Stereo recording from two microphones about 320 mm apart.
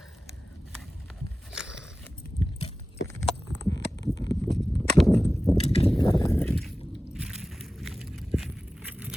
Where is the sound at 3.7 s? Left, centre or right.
Left.